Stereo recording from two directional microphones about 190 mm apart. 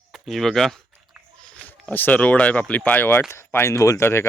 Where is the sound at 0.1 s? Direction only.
Centre (ahead or behind).